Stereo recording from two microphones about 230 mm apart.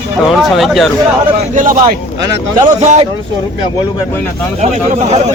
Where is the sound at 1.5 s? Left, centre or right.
Right.